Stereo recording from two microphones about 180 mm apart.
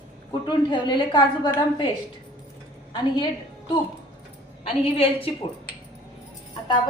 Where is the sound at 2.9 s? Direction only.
25° left (ahead or behind).